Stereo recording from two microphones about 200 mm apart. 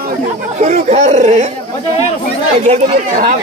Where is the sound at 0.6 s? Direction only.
35° right (ahead or behind).